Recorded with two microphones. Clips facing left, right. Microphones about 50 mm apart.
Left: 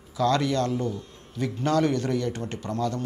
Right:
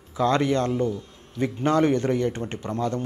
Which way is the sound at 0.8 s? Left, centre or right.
Centre.